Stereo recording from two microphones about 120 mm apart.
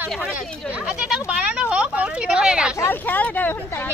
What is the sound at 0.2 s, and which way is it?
Speech, 10° right (ahead or behind).